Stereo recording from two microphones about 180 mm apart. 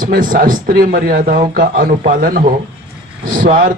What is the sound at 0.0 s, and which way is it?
A man's voice, 50° right (ahead or behind).